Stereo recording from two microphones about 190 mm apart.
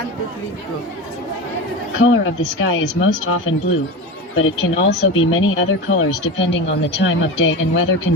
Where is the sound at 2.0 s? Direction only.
90° left.